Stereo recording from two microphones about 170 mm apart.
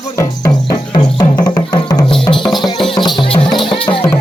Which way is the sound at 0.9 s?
20° left (ahead or behind).